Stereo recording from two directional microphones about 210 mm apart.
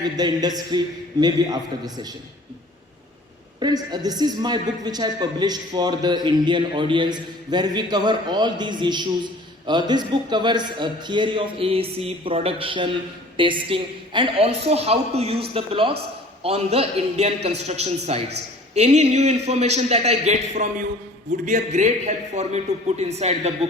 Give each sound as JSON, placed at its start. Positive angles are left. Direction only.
{"t": 0.0, "sound": "a man's voice", "side_deg": -20}
{"t": 3.6, "sound": "a man's voice", "side_deg": -20}